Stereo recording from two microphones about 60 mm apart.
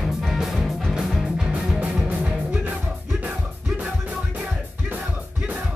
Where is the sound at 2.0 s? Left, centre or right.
Right.